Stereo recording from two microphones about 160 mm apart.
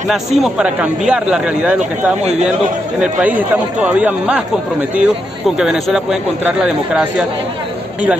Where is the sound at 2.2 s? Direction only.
45° right (ahead or behind).